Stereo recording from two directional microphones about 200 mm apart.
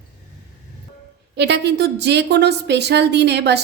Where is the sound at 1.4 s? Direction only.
55° right (ahead or behind).